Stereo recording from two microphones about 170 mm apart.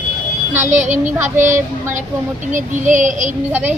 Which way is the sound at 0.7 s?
45° right (ahead or behind).